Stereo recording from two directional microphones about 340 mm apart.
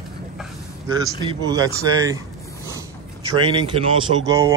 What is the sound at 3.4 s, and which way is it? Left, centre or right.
Speech, centre.